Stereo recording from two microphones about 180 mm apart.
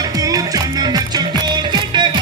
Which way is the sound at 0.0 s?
20° right (ahead or behind).